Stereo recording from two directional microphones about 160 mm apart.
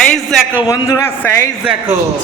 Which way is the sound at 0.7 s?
15° left (ahead or behind).